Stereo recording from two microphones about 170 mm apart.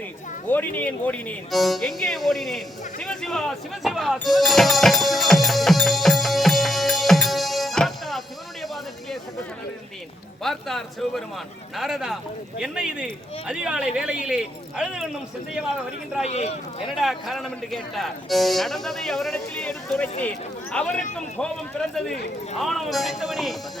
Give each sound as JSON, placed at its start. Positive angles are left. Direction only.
{"t": 0.4, "sound": "speech", "side_deg": 10}
{"t": 3.0, "sound": "music", "side_deg": 0}
{"t": 8.6, "sound": "a sound", "side_deg": 0}
{"t": 10.4, "sound": "speech", "side_deg": 0}
{"t": 16.2, "sound": "speech", "side_deg": 40}
{"t": 16.9, "sound": "a man's voice", "side_deg": 0}